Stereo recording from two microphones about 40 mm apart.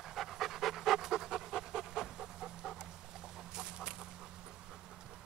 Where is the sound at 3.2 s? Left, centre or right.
Centre.